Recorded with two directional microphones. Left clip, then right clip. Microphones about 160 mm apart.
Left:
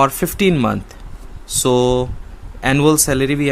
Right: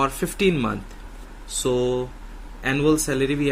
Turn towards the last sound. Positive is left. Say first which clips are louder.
# left 6 dB
turn(degrees=50)  # may be behind; listen again after turning